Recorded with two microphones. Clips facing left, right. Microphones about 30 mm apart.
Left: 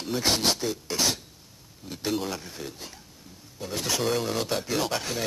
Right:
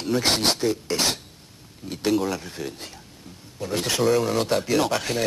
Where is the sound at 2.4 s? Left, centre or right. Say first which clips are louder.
Right 5 dB; right.